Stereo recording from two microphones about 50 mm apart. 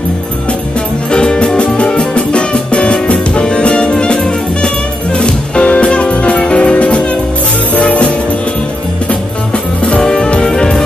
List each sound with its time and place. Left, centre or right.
1.1 s music: centre
9.8 s music: centre